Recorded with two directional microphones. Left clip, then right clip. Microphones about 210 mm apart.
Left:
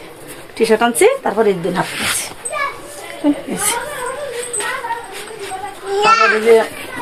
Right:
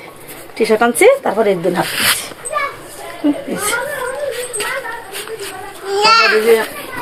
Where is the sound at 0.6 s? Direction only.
20° left (ahead or behind).